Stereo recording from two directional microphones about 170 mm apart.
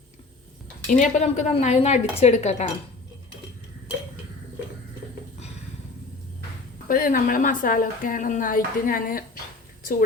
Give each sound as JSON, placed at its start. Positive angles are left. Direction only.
{"t": 0.9, "sound": "a woman's voice", "side_deg": 45}
{"t": 6.8, "sound": "a woman's voice", "side_deg": 55}